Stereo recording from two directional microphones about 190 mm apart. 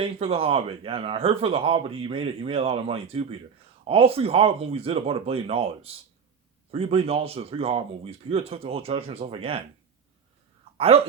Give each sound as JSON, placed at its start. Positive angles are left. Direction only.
{"t": 0.0, "sound": "speech", "side_deg": -30}
{"t": 10.8, "sound": "speech", "side_deg": -30}